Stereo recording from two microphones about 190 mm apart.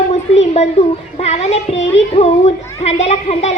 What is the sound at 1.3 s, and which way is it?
A child's voice, 35° left (ahead or behind).